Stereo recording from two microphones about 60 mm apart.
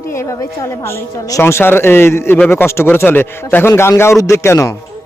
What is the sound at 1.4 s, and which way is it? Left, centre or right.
A man's voice, left.